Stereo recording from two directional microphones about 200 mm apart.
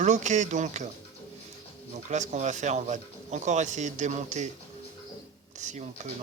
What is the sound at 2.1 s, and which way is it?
A man's voice, 35° right (ahead or behind).